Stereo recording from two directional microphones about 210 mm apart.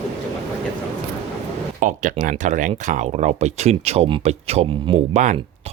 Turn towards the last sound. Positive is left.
turn(degrees=-30)  # may be behind; listen again after turning